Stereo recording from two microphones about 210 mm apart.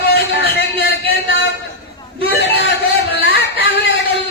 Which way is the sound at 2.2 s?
50° left (ahead or behind).